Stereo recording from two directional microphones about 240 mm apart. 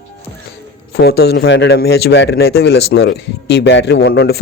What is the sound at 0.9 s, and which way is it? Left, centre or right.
Speech, left.